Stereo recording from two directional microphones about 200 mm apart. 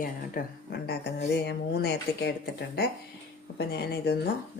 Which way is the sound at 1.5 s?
55° left (ahead or behind).